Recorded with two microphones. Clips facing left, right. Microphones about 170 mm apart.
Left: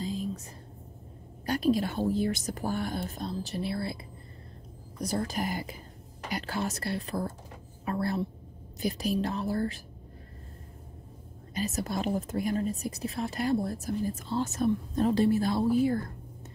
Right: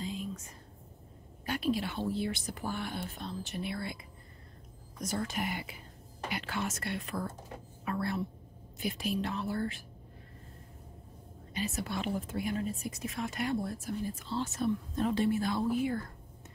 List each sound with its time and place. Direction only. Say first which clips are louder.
0.0 s whispering: left 5 dB; 35° left (ahead or behind)
1.4 s a woman's voice: left 6 dB; 40° left (ahead or behind)
5.0 s a woman's voice: left 4 dB; 35° left (ahead or behind)
11.5 s a woman's voice: left 4 dB; 40° left (ahead or behind)